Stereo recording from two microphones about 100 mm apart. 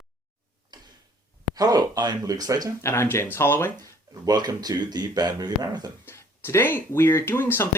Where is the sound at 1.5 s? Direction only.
40° right (ahead or behind).